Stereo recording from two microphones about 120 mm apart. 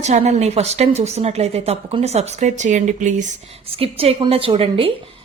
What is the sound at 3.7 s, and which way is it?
A woman's voice, 55° right (ahead or behind).